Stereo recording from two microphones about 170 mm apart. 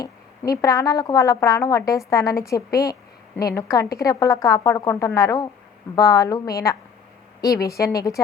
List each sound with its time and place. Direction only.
0.0 s a woman's voice: 20° left (ahead or behind)